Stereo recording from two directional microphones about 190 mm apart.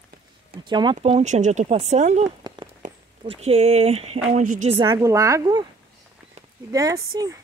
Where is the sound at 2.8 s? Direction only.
40° right (ahead or behind).